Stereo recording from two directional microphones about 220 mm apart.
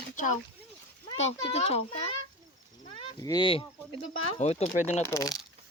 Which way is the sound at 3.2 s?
20° left (ahead or behind).